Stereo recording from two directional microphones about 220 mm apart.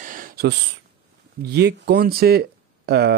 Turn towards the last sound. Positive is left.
turn(degrees=-45)  # may be behind; listen again after turning